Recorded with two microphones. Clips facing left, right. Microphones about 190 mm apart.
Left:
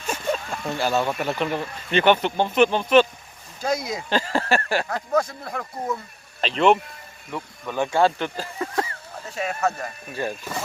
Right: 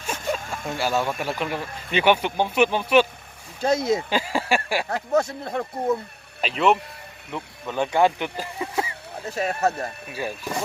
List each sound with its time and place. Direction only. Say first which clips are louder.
0.3 s a sound: left 1 dB; 50° right (ahead or behind)
0.8 s speech: left 1 dB; 10° right (ahead or behind)
3.6 s speech: right 5 dB; 25° right (ahead or behind)
4.1 s speech: left 1 dB; 10° right (ahead or behind)
5.1 s speech: right 2 dB; 25° right (ahead or behind)
6.4 s speech: left 2 dB; 5° right (ahead or behind)
7.8 s speech: even; 15° right (ahead or behind)
9.3 s speech: right 2 dB; 40° right (ahead or behind)
10.1 s speech: left 4 dB; 10° right (ahead or behind)